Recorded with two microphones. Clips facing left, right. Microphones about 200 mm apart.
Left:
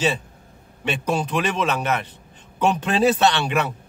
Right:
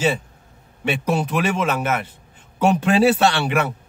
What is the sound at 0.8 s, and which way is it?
A man's voice, 10° right (ahead or behind).